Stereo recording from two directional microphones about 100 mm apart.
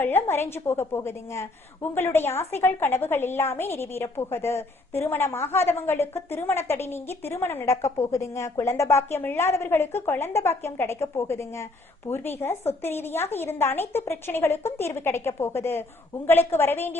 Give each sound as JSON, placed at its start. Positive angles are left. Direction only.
{"t": 0.0, "sound": "a woman's voice", "side_deg": 20}